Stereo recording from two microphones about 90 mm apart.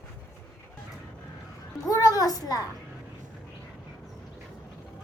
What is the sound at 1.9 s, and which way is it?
Speech, 40° left (ahead or behind).